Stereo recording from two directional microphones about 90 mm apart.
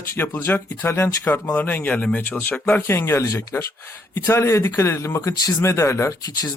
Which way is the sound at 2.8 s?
25° left (ahead or behind).